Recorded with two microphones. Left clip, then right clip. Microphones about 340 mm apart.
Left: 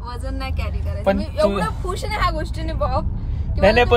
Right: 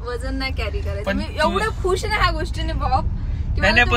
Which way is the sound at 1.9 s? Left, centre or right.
Centre.